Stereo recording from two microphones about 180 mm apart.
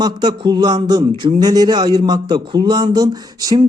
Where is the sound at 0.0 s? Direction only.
25° right (ahead or behind).